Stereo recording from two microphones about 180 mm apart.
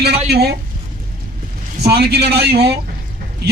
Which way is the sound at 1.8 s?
65° right (ahead or behind).